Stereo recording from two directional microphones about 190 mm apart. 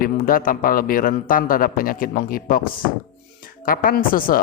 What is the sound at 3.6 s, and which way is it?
Speech, 50° left (ahead or behind).